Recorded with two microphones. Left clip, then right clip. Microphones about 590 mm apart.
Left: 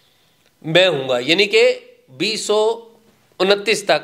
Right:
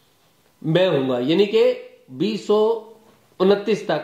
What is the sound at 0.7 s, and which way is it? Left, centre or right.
A man's voice, left.